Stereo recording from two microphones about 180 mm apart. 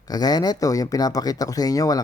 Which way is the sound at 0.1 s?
20° left (ahead or behind).